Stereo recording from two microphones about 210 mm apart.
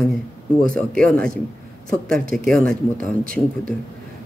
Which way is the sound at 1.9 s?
40° right (ahead or behind).